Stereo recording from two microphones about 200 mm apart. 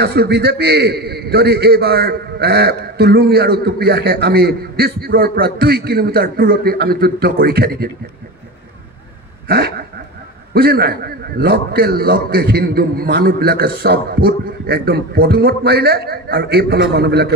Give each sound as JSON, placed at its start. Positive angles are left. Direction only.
{"t": 0.0, "sound": "a man's voice", "side_deg": -55}
{"t": 9.5, "sound": "a man's voice", "side_deg": -50}